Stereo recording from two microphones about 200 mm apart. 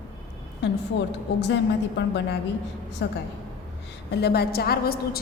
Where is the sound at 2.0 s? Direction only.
65° left (ahead or behind).